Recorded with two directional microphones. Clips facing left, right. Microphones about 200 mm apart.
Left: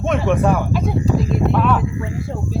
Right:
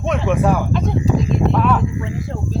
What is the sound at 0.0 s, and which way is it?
Speech, centre (ahead or behind).